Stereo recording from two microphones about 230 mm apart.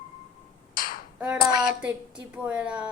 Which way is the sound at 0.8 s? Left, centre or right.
Left.